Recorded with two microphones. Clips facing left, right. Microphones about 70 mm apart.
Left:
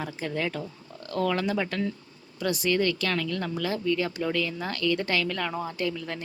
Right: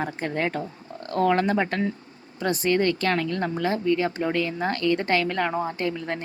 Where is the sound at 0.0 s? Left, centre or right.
Right.